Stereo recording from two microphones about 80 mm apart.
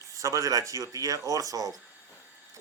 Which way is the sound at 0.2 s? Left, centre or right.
Right.